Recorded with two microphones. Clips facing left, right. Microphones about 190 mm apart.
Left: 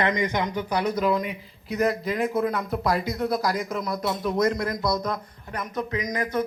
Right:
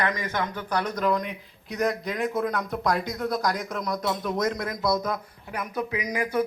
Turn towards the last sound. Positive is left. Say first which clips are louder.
# even
turn(degrees=-10)  # may be behind; listen again after turning